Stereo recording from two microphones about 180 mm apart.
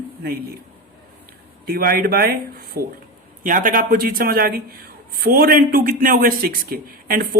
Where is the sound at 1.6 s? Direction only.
55° right (ahead or behind).